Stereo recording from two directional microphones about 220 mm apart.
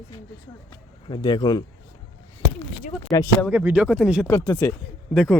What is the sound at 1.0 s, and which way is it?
Speech, 20° left (ahead or behind).